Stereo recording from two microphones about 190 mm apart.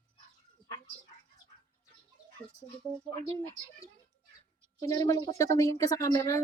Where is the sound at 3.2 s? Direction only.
15° left (ahead or behind).